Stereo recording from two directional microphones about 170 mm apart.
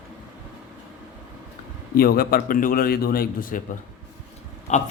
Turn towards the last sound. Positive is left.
turn(degrees=45)  # may be behind; listen again after turning